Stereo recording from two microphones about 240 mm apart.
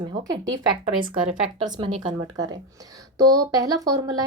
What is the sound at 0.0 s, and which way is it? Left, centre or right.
A woman's voice, centre.